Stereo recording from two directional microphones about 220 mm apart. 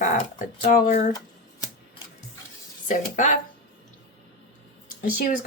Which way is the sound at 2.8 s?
35° left (ahead or behind).